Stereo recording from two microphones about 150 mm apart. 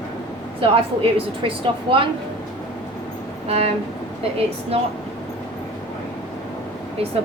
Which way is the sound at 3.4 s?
40° right (ahead or behind).